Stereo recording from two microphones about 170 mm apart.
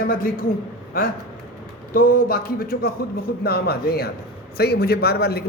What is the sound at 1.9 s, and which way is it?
A man's voice, 60° left (ahead or behind).